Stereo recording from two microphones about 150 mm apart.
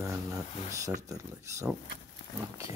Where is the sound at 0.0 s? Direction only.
20° right (ahead or behind).